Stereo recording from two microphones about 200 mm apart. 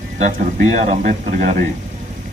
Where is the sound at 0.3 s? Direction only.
35° right (ahead or behind).